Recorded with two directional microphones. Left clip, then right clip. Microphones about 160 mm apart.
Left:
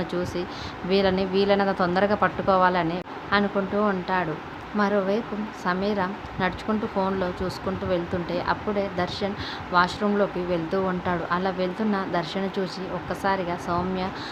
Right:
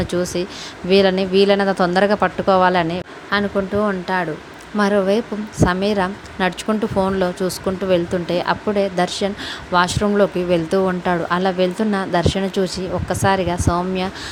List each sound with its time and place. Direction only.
0.0 s a woman's voice: 45° right (ahead or behind)